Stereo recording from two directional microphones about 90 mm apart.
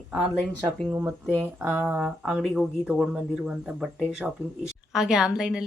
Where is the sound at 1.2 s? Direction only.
15° right (ahead or behind).